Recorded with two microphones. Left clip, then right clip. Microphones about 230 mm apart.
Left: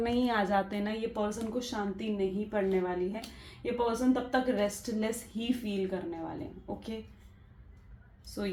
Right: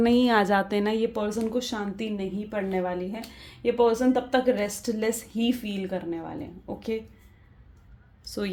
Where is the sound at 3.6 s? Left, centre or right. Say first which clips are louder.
Right 9 dB; right.